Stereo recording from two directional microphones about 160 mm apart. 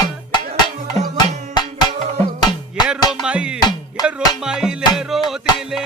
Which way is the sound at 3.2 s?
5° right (ahead or behind).